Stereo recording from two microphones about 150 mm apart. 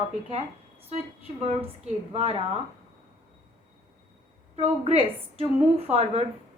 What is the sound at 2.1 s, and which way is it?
Speech, 40° right (ahead or behind).